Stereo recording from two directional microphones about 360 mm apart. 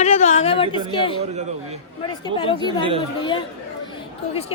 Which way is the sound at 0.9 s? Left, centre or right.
Centre.